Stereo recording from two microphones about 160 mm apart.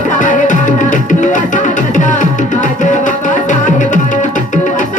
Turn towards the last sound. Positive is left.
turn(degrees=55)  # may be behind; listen again after turning